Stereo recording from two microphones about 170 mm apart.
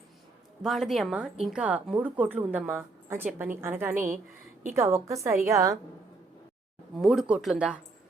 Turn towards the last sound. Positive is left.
turn(degrees=-5)  # may be behind; listen again after turning